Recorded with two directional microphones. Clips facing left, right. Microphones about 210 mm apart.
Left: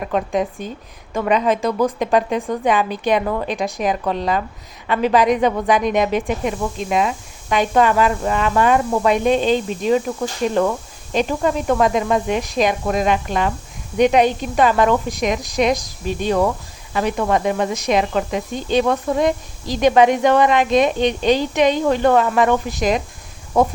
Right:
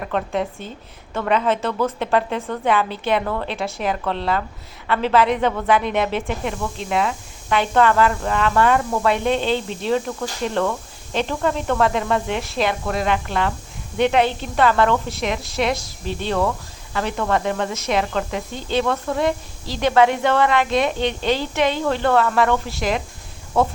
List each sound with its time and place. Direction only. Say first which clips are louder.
0.0 s speech: left 3 dB; 15° left (ahead or behind)